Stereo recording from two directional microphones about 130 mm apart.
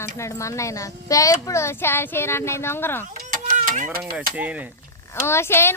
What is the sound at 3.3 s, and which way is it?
Mechanisms, 90° right.